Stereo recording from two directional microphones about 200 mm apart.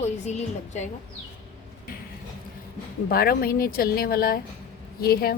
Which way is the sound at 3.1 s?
50° left (ahead or behind).